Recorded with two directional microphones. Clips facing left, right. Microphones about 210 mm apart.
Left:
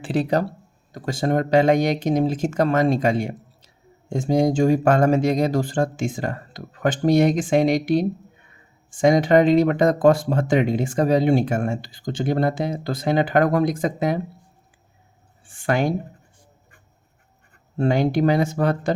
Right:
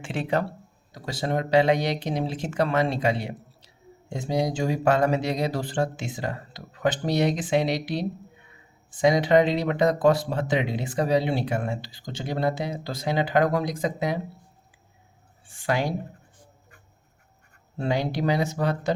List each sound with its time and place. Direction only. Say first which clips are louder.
0.0 s speech: left 5 dB; 35° left (ahead or behind)
0.9 s speech: left 6 dB; 50° left (ahead or behind)
15.4 s speech: left 5 dB; 50° left (ahead or behind)
17.7 s speech: left 7 dB; 50° left (ahead or behind)